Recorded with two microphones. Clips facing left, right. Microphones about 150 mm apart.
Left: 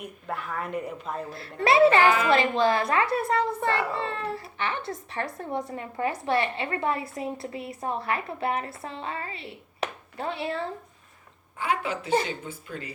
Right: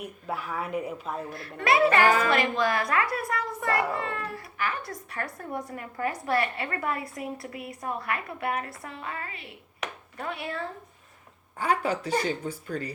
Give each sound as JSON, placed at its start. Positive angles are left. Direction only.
{"t": 0.0, "sound": "speech", "side_deg": -5}
{"t": 1.3, "sound": "a child's voice", "side_deg": 30}
{"t": 2.0, "sound": "speech", "side_deg": -40}
{"t": 2.3, "sound": "a child's voice", "side_deg": 30}
{"t": 11.6, "sound": "speech", "side_deg": -40}